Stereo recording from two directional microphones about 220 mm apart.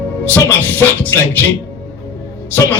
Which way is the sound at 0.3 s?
10° left (ahead or behind).